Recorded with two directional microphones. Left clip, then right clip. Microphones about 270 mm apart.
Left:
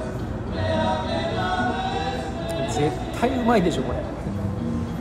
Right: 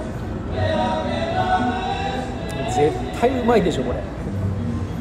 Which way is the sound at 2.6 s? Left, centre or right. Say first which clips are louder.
Right 9 dB; centre.